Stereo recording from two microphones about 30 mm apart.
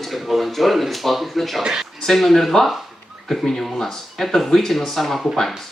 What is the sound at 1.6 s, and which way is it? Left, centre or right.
Speech, centre.